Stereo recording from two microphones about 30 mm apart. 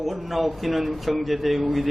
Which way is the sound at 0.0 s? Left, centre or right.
Centre.